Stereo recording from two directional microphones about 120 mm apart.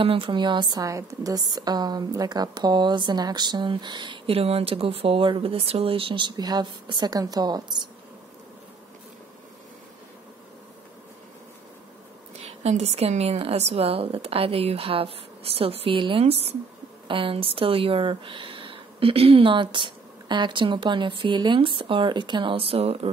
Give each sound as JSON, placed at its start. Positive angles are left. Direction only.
{"t": 0.0, "sound": "a woman's voice", "side_deg": -45}
{"t": 12.4, "sound": "speech", "side_deg": -65}